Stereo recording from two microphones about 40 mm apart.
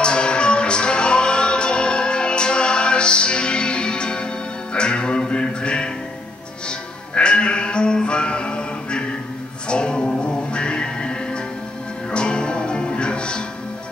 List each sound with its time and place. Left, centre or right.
0.0 s music: left
7.2 s music: left